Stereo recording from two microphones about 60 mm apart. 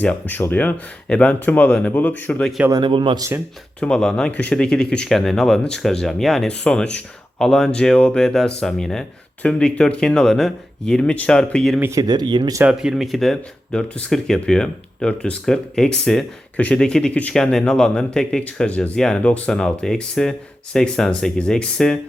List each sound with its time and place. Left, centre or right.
0.3 s speech: left
1.0 s speech: centre
2.6 s speech: right
3.8 s speech: centre
4.3 s speech: left
4.5 s speech: centre
6.5 s speech: centre
9.4 s speech: centre
12.0 s speech: right
12.7 s speech: centre
16.6 s speech: centre